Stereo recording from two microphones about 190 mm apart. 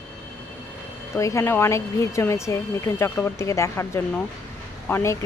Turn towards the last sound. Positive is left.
turn(degrees=15)  # may be behind; listen again after turning